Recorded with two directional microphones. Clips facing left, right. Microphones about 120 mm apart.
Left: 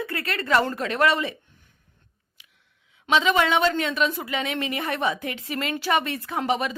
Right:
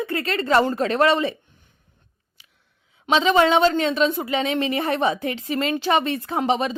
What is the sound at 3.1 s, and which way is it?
A woman's voice, 30° right (ahead or behind).